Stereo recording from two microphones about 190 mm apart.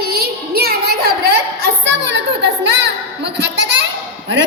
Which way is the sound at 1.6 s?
70° right (ahead or behind).